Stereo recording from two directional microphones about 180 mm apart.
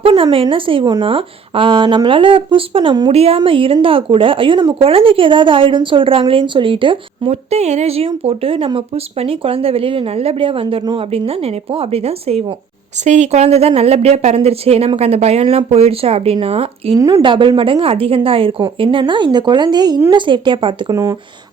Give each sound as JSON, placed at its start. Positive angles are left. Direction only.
{"t": 0.0, "sound": "speech", "side_deg": -30}
{"t": 20.9, "sound": "speech", "side_deg": -15}